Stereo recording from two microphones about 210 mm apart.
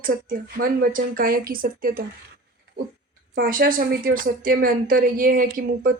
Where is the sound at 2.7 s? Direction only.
55° right (ahead or behind).